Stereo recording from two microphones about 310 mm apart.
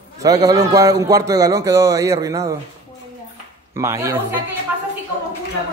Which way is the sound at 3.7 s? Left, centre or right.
Centre.